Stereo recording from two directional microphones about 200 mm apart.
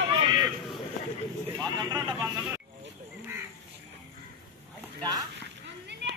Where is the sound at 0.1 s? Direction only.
25° right (ahead or behind).